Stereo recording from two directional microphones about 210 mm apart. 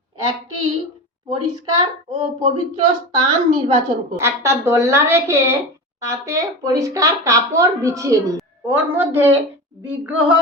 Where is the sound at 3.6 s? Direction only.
15° right (ahead or behind).